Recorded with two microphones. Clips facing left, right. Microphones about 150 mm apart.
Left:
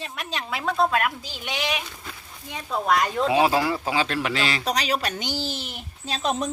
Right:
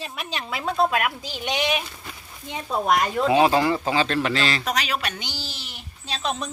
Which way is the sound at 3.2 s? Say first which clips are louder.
Right 4 dB; 5° left (ahead or behind).